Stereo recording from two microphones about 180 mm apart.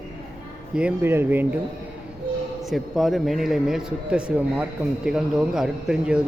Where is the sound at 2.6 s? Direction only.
Centre (ahead or behind).